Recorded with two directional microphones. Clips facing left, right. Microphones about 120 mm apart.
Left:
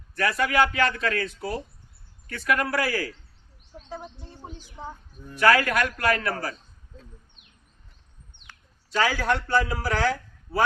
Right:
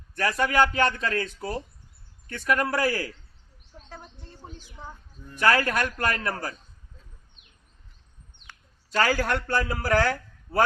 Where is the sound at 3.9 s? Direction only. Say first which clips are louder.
Left 7 dB; 10° left (ahead or behind).